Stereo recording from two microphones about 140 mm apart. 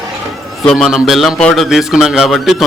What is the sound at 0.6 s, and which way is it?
Speech, 5° left (ahead or behind).